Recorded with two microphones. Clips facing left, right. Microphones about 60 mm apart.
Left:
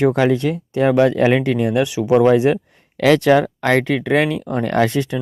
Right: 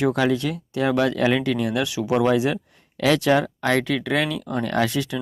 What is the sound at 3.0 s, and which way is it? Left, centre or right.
Speech, left.